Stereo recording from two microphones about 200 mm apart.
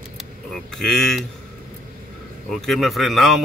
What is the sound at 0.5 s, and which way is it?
Speech, centre (ahead or behind).